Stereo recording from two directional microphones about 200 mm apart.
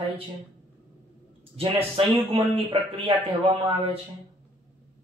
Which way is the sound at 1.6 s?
30° right (ahead or behind).